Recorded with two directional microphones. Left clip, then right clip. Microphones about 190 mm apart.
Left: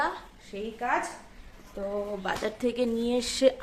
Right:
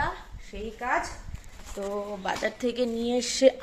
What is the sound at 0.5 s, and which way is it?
Speech, 10° left (ahead or behind).